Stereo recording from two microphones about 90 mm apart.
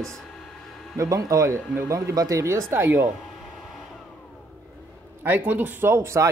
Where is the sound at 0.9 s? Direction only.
40° right (ahead or behind).